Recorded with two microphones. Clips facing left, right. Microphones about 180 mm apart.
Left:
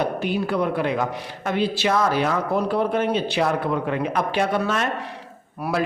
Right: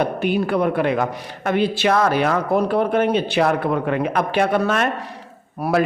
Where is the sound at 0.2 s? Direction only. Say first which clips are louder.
Right 4 dB; 60° right (ahead or behind).